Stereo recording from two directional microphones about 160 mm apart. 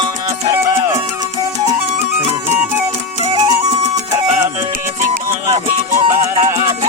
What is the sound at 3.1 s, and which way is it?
Music, 40° right (ahead or behind).